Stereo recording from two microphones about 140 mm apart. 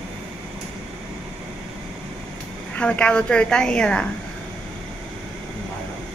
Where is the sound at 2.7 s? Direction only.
10° left (ahead or behind).